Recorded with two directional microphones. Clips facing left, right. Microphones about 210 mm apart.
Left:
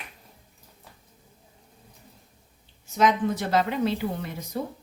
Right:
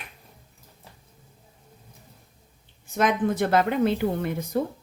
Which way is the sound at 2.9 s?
55° right (ahead or behind).